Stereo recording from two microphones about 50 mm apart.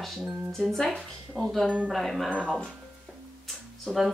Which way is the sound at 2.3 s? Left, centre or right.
Right.